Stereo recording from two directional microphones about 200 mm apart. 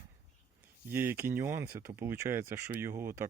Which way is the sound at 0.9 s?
10° right (ahead or behind).